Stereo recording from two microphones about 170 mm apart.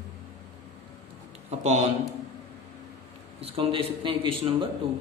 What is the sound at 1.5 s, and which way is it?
Speech, 40° right (ahead or behind).